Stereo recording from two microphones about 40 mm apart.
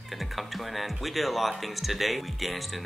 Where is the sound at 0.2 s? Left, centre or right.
Centre.